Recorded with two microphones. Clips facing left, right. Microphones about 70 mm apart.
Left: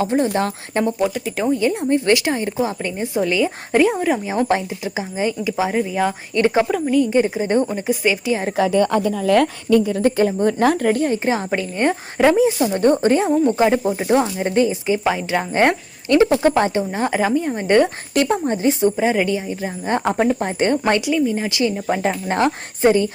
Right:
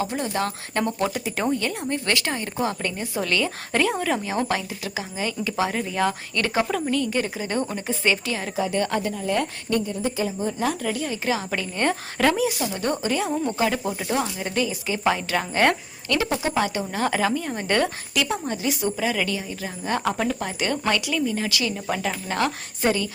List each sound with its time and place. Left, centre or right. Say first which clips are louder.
0.0 s speech: left 7 dB; left
0.8 s a woman's voice: left 5 dB; centre
1.0 s speech: left 4 dB; centre
1.5 s a woman's voice: left 8 dB; centre
6.3 s speech: left 7 dB; left
6.7 s a woman's voice: left 7 dB; centre
7.1 s speech: left 8 dB; left
7.7 s a woman's voice: left 5 dB; centre
9.2 s a woman's voice: left 11 dB; left
10.2 s a woman's voice: left 9 dB; left
11.5 s speech: left 5 dB; left
16.4 s a woman's voice: left 8 dB; left
16.6 s speech: left 5 dB; left
18.1 s speech: left 7 dB; left